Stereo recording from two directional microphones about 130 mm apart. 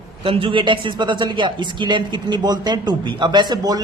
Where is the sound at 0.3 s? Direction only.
45° right (ahead or behind).